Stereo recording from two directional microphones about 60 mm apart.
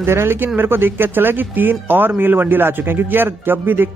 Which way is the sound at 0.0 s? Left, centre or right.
Right.